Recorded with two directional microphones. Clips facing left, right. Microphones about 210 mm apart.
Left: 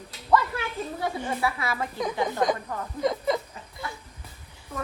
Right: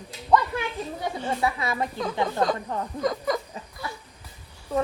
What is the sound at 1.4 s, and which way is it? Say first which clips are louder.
Speech: right 3 dB; 20° right (ahead or behind).